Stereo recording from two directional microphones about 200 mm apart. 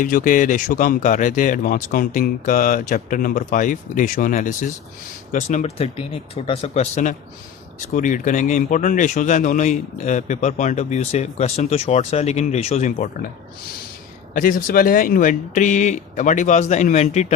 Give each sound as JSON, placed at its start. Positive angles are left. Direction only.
{"t": 0.0, "sound": "speech", "side_deg": 40}
{"t": 14.3, "sound": "speech", "side_deg": 45}